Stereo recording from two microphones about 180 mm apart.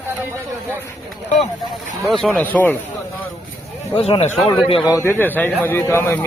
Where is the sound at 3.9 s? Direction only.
35° left (ahead or behind).